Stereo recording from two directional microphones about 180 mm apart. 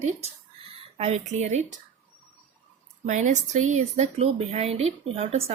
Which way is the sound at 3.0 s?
40° right (ahead or behind).